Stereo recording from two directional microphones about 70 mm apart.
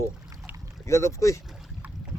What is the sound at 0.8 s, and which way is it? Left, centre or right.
Speech, left.